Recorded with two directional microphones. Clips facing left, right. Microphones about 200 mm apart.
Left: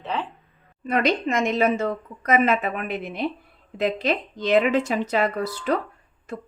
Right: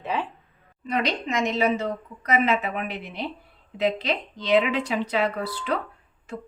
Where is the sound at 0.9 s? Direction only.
55° left (ahead or behind).